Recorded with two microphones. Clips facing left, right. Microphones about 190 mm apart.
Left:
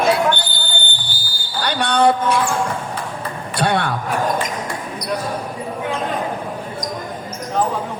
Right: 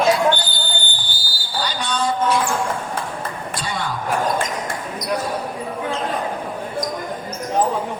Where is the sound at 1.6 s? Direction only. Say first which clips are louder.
Left 7 dB; 60° left (ahead or behind).